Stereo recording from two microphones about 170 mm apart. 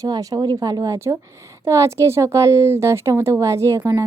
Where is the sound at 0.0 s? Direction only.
20° right (ahead or behind).